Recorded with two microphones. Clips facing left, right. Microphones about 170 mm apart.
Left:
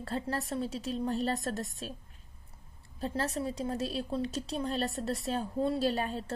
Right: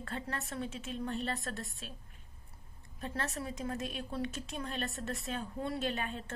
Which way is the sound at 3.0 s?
30° left (ahead or behind).